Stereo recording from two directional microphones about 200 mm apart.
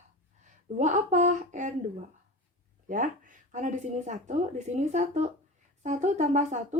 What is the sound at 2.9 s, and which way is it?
A woman's voice, 40° right (ahead or behind).